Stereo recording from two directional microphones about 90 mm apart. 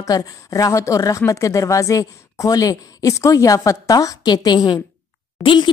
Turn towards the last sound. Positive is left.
turn(degrees=65)  # may be behind; listen again after turning